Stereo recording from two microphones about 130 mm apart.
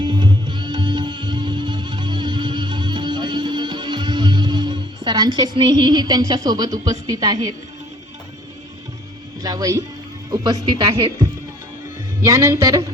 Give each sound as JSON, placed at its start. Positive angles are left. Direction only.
{"t": 0.0, "sound": "music", "side_deg": -35}
{"t": 9.4, "sound": "speech", "side_deg": -30}